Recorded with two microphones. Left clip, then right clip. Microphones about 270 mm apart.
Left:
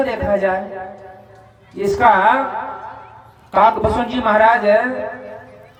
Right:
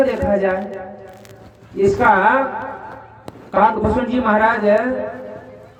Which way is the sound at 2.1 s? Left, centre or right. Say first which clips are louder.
Left 1 dB; left.